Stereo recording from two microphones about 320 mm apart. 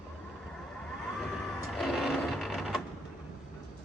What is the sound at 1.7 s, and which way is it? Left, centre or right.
Sewing machine, centre.